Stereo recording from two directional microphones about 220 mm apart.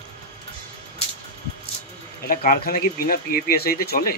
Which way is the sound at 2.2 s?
40° left (ahead or behind).